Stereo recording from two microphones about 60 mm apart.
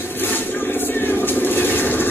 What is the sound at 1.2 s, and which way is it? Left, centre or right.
Vehicle, left.